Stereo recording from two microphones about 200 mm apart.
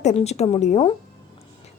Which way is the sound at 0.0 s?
35° left (ahead or behind).